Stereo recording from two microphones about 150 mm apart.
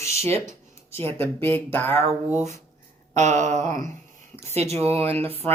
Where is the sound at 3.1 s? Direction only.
55° right (ahead or behind).